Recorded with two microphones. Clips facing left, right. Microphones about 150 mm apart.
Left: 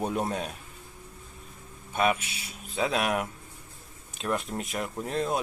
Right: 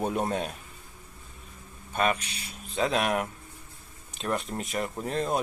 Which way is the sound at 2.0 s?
5° left (ahead or behind).